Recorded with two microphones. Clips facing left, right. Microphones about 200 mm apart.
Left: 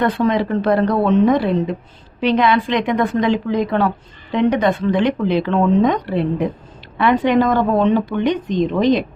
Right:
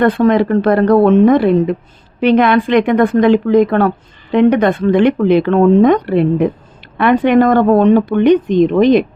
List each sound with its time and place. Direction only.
0.0 s a woman's voice: 55° right (ahead or behind)